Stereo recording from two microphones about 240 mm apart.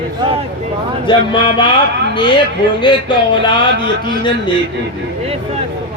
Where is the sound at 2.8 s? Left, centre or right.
Centre.